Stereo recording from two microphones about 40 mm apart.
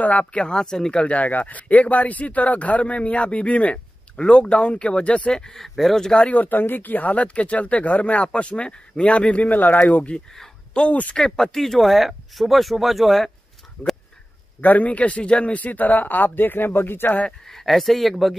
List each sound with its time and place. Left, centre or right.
0.0 s speech: left
0.4 s speech: left
0.9 s speech: left
5.4 s speech: centre
6.3 s speech: left
9.6 s a man's voice: left
10.7 s speech: left
11.5 s speech: centre
14.6 s a man's voice: left
17.5 s speech: centre